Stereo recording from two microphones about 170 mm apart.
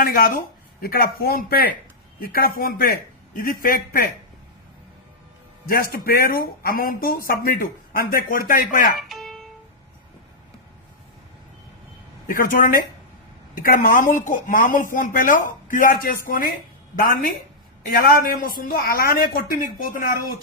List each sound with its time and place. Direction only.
0.0 s speech: 60° left (ahead or behind)
5.6 s speech: 60° left (ahead or behind)
9.0 s music: centre (ahead or behind)
12.3 s speech: 55° left (ahead or behind)